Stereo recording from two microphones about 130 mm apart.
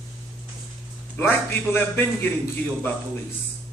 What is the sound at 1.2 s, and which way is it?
A man's voice, 15° left (ahead or behind).